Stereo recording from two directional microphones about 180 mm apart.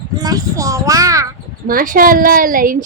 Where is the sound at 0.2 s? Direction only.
20° right (ahead or behind).